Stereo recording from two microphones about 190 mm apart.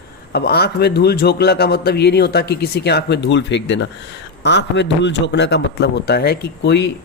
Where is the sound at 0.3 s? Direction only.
55° left (ahead or behind).